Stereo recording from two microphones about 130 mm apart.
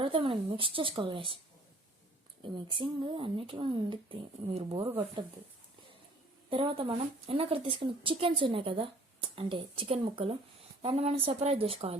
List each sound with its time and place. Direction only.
0.0 s speech: 40° right (ahead or behind)
2.4 s speech: 40° right (ahead or behind)
6.5 s speech: 40° right (ahead or behind)
10.8 s speech: 55° right (ahead or behind)